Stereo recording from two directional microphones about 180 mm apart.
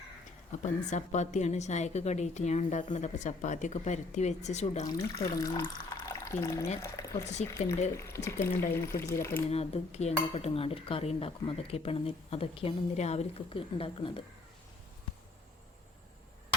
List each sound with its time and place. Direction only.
0.6 s speech: 40° left (ahead or behind)
4.9 s speech: 20° left (ahead or behind)
7.4 s speech: 40° left (ahead or behind)
7.9 s speech: 15° left (ahead or behind)
8.4 s speech: 55° left (ahead or behind)
9.0 s speech: 15° left (ahead or behind)
9.5 s speech: 35° left (ahead or behind)